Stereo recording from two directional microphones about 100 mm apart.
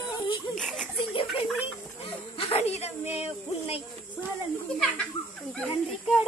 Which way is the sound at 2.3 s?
90° left.